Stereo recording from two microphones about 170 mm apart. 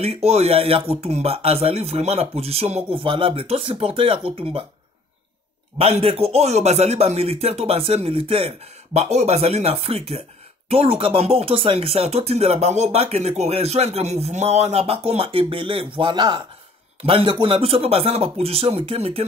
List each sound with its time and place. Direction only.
0.0 s speech: 40° right (ahead or behind)
5.8 s speech: 35° right (ahead or behind)